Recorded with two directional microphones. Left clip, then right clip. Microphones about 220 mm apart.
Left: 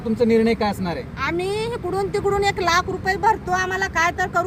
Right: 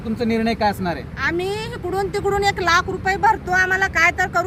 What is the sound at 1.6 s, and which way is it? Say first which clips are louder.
Speech: even; 5° right (ahead or behind).